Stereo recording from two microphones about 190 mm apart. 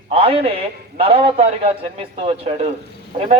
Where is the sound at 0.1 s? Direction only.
30° right (ahead or behind).